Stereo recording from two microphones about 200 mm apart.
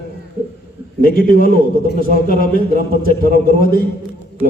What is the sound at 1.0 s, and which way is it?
A man's voice, 45° left (ahead or behind).